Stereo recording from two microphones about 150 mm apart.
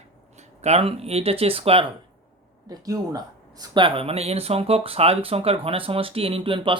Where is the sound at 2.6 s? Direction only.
25° right (ahead or behind).